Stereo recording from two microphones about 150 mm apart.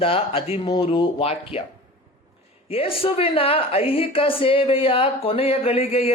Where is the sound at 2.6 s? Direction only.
40° left (ahead or behind).